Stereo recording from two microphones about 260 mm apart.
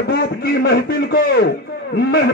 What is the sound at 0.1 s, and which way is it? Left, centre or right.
A man's voice, left.